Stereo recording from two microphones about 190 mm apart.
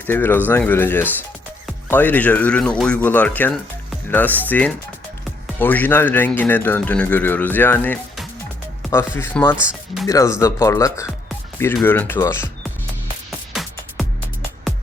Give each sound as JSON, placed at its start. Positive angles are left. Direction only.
{"t": 0.1, "sound": "speech", "side_deg": 10}
{"t": 9.1, "sound": "speech", "side_deg": 10}
{"t": 9.6, "sound": "speech", "side_deg": -5}
{"t": 10.1, "sound": "speech", "side_deg": 15}
{"t": 13.5, "sound": "music", "side_deg": 0}